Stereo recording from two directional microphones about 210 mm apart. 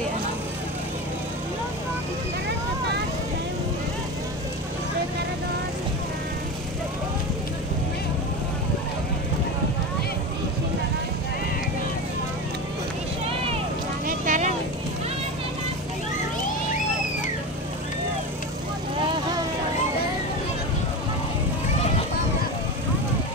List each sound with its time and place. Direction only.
14.0 s vehicle: 35° right (ahead or behind)